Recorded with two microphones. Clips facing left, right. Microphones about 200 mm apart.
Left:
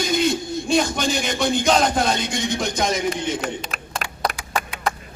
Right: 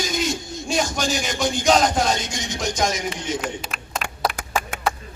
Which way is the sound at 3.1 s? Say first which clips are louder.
Left 2 dB; 45° left (ahead or behind).